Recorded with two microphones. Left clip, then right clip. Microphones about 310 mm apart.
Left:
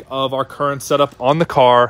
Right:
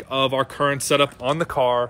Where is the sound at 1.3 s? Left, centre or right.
Left.